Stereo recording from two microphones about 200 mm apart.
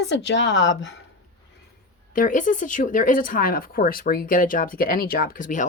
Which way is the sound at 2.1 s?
40° left (ahead or behind).